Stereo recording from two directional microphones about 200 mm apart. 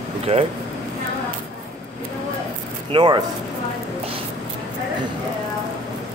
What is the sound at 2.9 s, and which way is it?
Speech, 25° right (ahead or behind).